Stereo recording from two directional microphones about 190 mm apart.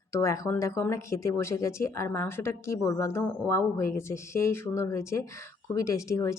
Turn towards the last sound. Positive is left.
turn(degrees=15)  # may be behind; listen again after turning